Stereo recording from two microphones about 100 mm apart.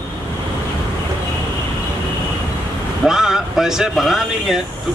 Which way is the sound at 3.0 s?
5° right (ahead or behind).